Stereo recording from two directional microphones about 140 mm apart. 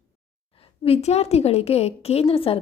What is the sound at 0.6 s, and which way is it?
A woman's voice, 45° left (ahead or behind).